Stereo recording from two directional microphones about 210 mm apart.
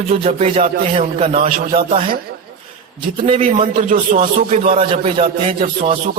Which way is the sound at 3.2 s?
30° right (ahead or behind).